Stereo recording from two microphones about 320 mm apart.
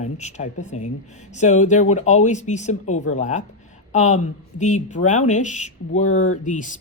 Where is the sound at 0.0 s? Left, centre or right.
Left.